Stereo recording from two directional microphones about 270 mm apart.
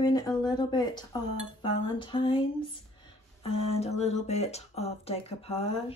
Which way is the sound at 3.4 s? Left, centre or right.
Left.